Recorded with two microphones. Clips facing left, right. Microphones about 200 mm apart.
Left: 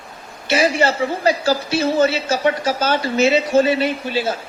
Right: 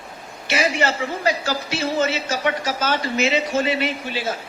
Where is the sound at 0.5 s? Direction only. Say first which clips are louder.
Left 4 dB; 35° left (ahead or behind).